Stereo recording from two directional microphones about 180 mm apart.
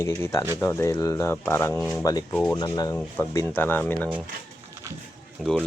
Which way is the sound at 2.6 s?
20° left (ahead or behind).